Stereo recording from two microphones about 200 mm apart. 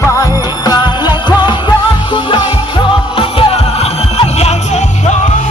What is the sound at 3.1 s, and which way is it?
Music, 25° left (ahead or behind).